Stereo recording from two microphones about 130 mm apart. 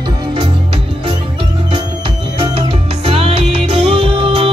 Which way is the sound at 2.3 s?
40° right (ahead or behind).